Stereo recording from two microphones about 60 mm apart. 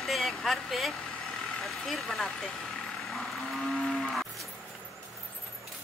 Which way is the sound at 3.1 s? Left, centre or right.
Centre.